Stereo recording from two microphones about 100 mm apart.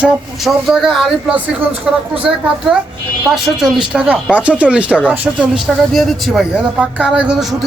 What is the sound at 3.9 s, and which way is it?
Speech, 15° right (ahead or behind).